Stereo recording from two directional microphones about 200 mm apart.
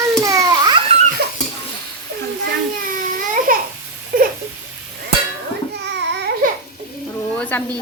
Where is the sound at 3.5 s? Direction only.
45° right (ahead or behind).